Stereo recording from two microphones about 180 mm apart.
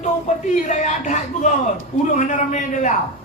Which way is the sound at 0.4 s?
40° left (ahead or behind).